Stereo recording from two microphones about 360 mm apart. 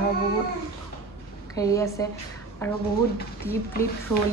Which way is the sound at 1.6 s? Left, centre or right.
Centre.